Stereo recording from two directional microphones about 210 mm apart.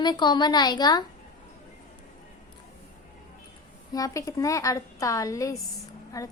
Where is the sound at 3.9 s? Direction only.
15° left (ahead or behind).